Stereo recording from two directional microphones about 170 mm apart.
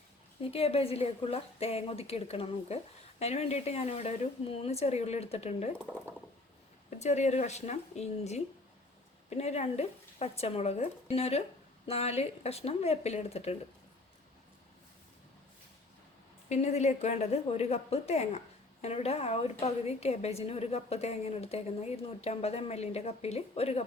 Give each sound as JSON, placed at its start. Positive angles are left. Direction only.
{"t": 0.4, "sound": "a woman's voice", "side_deg": 35}
{"t": 5.8, "sound": "speech", "side_deg": 10}
{"t": 7.0, "sound": "a woman's voice", "side_deg": 40}
{"t": 16.5, "sound": "a woman's voice", "side_deg": 40}